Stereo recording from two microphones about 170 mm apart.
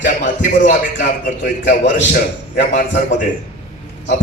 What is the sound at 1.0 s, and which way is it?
Speech, 50° left (ahead or behind).